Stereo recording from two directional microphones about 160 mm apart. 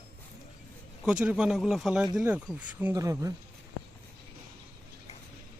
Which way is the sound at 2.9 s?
20° right (ahead or behind).